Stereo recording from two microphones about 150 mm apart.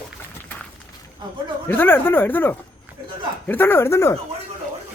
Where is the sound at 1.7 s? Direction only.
15° left (ahead or behind).